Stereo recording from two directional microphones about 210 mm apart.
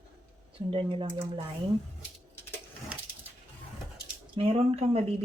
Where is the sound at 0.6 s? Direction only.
25° right (ahead or behind).